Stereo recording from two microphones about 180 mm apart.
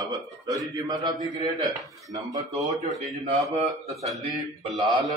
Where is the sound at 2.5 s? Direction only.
Centre (ahead or behind).